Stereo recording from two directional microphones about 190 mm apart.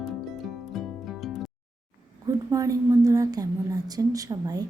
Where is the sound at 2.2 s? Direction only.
15° right (ahead or behind).